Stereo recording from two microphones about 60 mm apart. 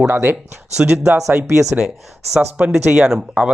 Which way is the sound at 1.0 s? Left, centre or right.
Right.